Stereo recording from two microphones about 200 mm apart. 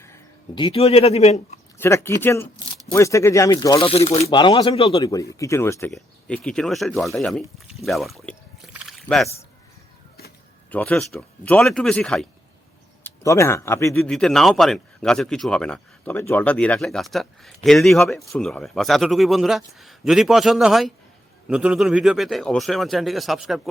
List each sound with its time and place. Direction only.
0.0 s speech: 20° left (ahead or behind)
1.8 s speech: 10° left (ahead or behind); by 5.0 s 30° left (ahead or behind)
5.3 s speech: 15° left (ahead or behind)
7.9 s a sound: centre (ahead or behind)
10.7 s speech: 10° left (ahead or behind)
14.0 s speech: 5° left (ahead or behind)